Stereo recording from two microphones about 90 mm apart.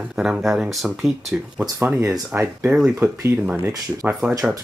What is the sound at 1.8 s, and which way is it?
Speech, 25° right (ahead or behind).